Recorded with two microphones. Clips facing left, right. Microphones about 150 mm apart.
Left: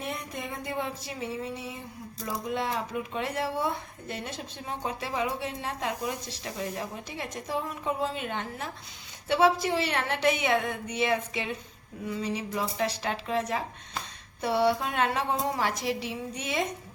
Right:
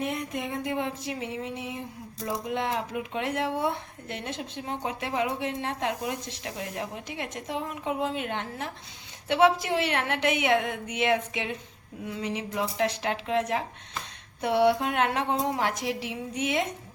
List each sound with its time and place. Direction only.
0.0 s a woman's voice: 20° right (ahead or behind)